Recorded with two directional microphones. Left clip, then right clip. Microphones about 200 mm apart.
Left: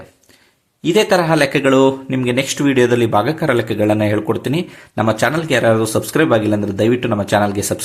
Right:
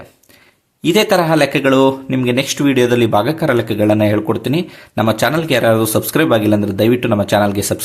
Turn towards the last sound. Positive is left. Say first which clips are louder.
# right 1 dB
turn(degrees=-10)  # may be behind; listen again after turning